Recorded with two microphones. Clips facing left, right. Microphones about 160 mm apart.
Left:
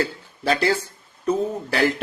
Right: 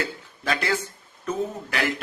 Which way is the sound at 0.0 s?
35° left (ahead or behind).